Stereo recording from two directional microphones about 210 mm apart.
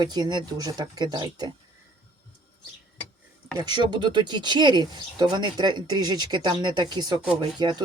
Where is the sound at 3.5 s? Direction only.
20° right (ahead or behind).